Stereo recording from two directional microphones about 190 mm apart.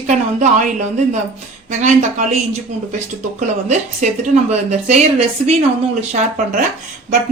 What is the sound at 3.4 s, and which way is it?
A woman's voice, 40° right (ahead or behind).